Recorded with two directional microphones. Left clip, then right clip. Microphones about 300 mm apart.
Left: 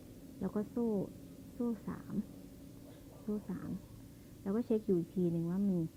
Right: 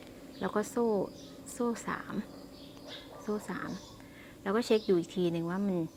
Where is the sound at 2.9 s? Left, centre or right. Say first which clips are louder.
Right 6 dB; centre.